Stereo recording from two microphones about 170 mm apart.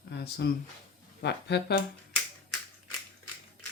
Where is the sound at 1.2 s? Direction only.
80° left.